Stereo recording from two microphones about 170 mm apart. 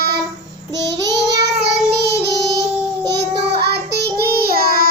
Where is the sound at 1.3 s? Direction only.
75° right (ahead or behind).